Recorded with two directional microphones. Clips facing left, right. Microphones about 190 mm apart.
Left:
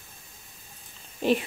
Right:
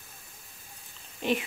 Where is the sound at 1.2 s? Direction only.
40° left (ahead or behind).